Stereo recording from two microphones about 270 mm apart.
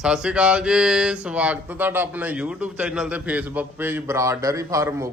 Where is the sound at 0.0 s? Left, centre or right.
Centre.